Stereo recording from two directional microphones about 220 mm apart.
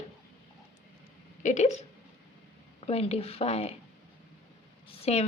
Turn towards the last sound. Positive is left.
turn(degrees=30)  # may be behind; listen again after turning